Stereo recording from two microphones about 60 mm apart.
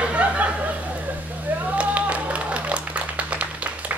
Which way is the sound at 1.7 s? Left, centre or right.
Right.